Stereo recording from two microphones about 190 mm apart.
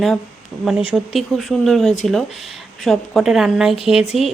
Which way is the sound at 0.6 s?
5° right (ahead or behind).